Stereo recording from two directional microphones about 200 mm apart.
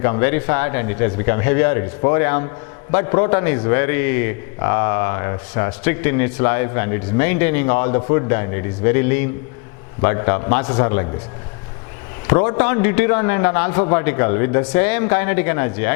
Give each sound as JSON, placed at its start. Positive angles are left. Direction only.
{"t": 0.0, "sound": "speech", "side_deg": 15}
{"t": 12.3, "sound": "speech", "side_deg": 15}